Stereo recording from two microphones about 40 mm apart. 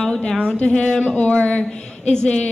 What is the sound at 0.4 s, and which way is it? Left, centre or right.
A woman's voice, left.